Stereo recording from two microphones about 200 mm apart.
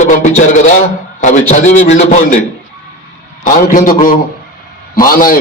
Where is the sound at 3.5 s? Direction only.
40° left (ahead or behind).